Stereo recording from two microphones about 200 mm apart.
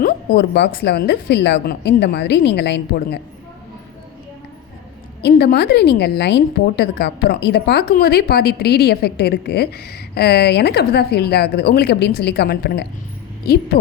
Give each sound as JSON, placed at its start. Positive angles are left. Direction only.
{"t": 0.0, "sound": "speech", "side_deg": 50}
{"t": 5.2, "sound": "a woman's voice", "side_deg": 55}